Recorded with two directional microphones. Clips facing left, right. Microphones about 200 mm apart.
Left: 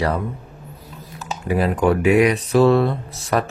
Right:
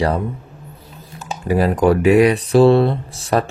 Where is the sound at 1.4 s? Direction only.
40° right (ahead or behind).